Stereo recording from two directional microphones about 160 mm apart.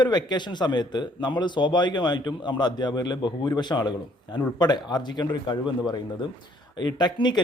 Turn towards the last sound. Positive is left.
turn(degrees=25)  # may be behind; listen again after turning